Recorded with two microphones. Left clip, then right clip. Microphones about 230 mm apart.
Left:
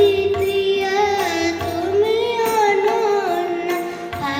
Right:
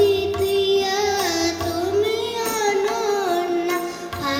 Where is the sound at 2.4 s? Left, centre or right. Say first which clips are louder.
Left 4 dB; right.